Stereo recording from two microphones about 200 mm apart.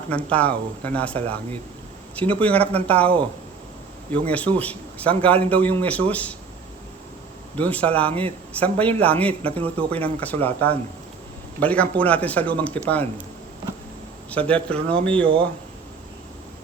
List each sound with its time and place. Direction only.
0.1 s speech: 5° left (ahead or behind)
7.5 s speech: 5° left (ahead or behind)
14.3 s speech: 5° left (ahead or behind)